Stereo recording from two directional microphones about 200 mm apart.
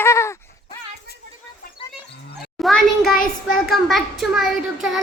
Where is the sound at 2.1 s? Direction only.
55° left (ahead or behind).